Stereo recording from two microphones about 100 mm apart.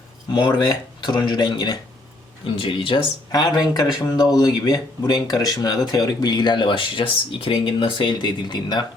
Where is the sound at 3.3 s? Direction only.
40° left (ahead or behind).